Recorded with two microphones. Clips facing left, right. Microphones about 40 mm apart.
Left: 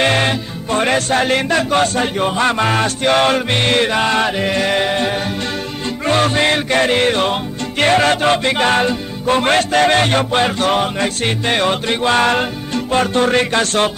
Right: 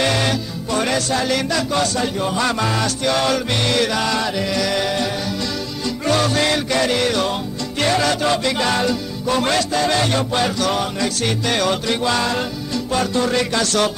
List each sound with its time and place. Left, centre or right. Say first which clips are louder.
0.0 s speech: left 4 dB; left
6.0 s music: left 3 dB; left
7.8 s speech: left 5 dB; left